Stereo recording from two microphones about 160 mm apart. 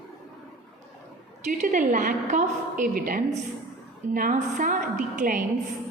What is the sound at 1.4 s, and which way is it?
A woman's voice, 55° right (ahead or behind).